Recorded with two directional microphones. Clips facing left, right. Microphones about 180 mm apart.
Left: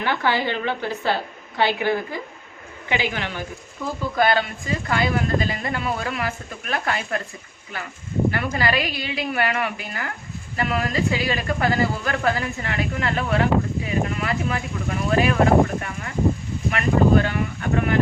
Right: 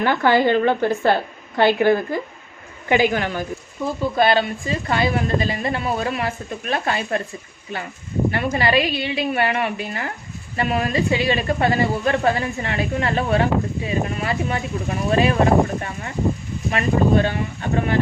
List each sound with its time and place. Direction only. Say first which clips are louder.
0.0 s speech: right 6 dB; 50° right (ahead or behind)
4.1 s a woman's voice: right 2 dB; 25° right (ahead or behind)
8.3 s a woman's voice: right 3 dB; 25° right (ahead or behind)